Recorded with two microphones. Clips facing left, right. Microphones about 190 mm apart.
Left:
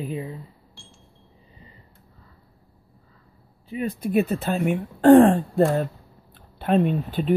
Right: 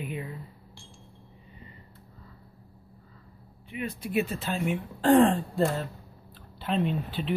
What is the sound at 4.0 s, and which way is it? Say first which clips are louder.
Speech: left 7 dB; 55° left (ahead or behind).